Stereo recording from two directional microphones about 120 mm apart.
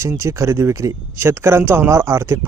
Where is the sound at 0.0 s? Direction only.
25° right (ahead or behind).